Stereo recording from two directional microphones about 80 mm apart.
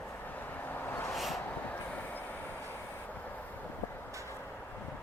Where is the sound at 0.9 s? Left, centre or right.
Left.